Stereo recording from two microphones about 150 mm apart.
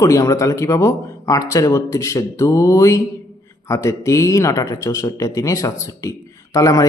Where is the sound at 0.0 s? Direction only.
20° left (ahead or behind).